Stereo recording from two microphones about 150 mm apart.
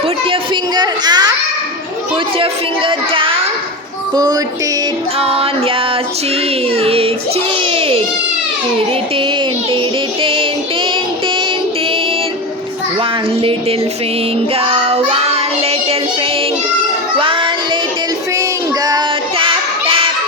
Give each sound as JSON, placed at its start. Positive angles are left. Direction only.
{"t": 0.3, "sound": "a sound", "side_deg": -30}
{"t": 2.4, "sound": "a woman's voice", "side_deg": -35}
{"t": 4.1, "sound": "child singing", "side_deg": -25}
{"t": 5.2, "sound": "a woman's voice", "side_deg": -40}
{"t": 6.7, "sound": "a woman's voice", "side_deg": -40}
{"t": 10.2, "sound": "a woman's voice", "side_deg": -35}
{"t": 13.0, "sound": "a woman's voice", "side_deg": -35}
{"t": 14.5, "sound": "child singing", "side_deg": -40}
{"t": 17.2, "sound": "child singing", "side_deg": -35}
{"t": 18.9, "sound": "child singing", "side_deg": -25}